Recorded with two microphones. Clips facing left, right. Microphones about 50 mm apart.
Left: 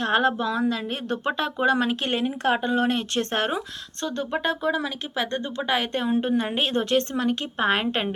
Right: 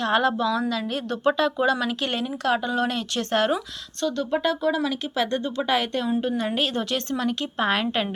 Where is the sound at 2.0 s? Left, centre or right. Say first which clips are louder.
Left 1 dB; left.